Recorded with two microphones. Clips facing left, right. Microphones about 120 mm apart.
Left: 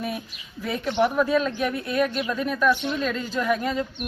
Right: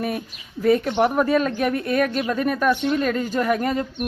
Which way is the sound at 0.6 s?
50° right (ahead or behind).